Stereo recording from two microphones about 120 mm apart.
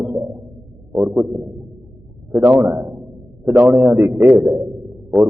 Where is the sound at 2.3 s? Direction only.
20° right (ahead or behind).